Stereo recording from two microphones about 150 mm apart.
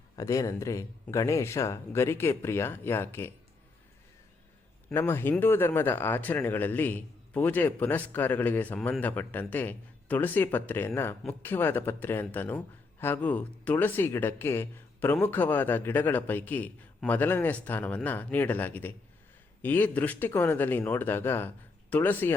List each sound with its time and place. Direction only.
0.2 s speech: 25° left (ahead or behind)
4.9 s speech: 15° left (ahead or behind)